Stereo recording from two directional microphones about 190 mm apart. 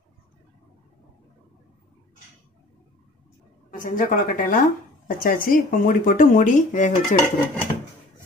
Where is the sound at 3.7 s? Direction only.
45° left (ahead or behind).